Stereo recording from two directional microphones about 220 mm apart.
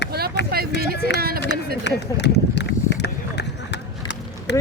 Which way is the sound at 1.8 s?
50° left (ahead or behind).